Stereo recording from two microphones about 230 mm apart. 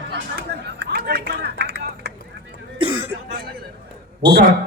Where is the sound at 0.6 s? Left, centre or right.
Right.